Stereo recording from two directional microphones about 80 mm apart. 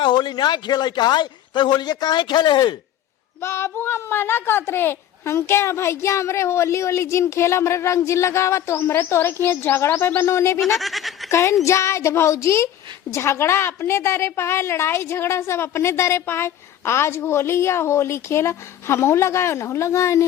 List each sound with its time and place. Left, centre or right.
0.0 s speech: left
3.4 s a woman's voice: left
10.8 s speech: centre
11.3 s a woman's voice: left